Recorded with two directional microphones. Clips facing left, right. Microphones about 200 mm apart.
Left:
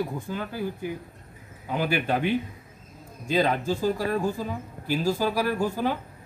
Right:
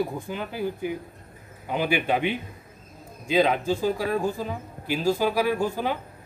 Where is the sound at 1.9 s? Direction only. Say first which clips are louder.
Even; 15° right (ahead or behind).